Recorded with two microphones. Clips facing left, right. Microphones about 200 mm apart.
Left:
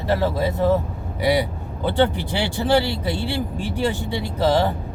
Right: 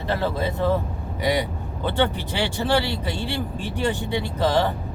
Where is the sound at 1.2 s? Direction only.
10° left (ahead or behind).